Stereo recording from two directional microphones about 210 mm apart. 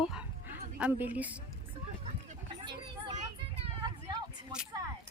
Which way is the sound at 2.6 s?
20° right (ahead or behind).